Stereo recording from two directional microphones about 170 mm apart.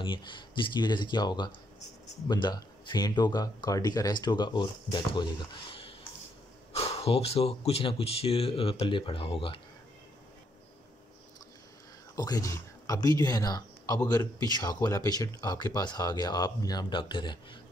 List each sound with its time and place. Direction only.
0.0 s speech: 30° left (ahead or behind)
12.2 s speech: 20° left (ahead or behind)